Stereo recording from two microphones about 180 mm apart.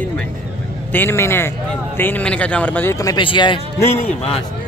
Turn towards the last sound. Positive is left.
turn(degrees=30)  # may be behind; listen again after turning